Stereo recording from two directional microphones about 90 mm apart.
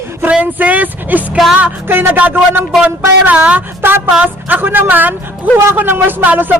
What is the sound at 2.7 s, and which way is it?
Speech, 5° right (ahead or behind).